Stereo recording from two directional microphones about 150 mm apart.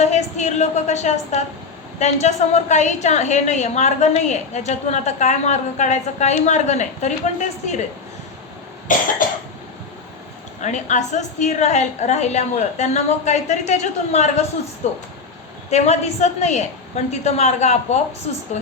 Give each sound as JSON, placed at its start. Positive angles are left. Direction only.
{"t": 0.0, "sound": "a sound", "side_deg": 50}
{"t": 2.0, "sound": "a woman's voice", "side_deg": 50}
{"t": 8.9, "sound": "cough", "side_deg": 60}
{"t": 10.6, "sound": "a woman's voice", "side_deg": 50}